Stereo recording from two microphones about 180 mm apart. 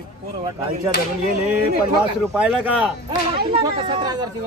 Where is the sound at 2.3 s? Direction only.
5° right (ahead or behind).